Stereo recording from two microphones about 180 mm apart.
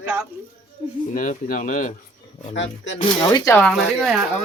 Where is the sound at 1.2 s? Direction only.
45° left (ahead or behind).